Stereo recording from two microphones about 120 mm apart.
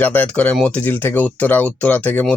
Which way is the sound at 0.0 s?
15° left (ahead or behind).